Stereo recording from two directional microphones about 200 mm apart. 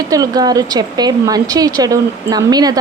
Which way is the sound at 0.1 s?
20° right (ahead or behind).